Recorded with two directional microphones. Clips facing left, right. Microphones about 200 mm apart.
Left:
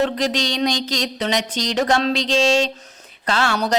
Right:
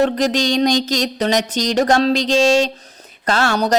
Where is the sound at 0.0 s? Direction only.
45° right (ahead or behind).